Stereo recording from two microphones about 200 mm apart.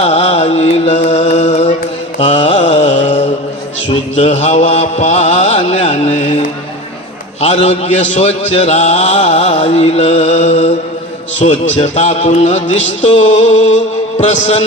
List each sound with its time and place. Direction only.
0.0 s chant: 30° left (ahead or behind)
2.1 s mantra: 35° left (ahead or behind)
7.4 s mantra: 35° left (ahead or behind)
8.2 s music: 35° left (ahead or behind)
11.8 s mantra: 35° left (ahead or behind)
12.8 s music: 70° left (ahead or behind)
13.1 s mantra: 35° left (ahead or behind)